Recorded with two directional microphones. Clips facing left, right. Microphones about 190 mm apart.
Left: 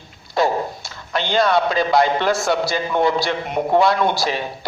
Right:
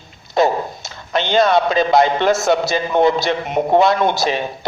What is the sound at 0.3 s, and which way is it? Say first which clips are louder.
A man's voice: right 3 dB; 20° right (ahead or behind).